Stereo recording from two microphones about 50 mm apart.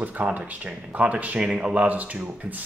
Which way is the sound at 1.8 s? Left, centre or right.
Right.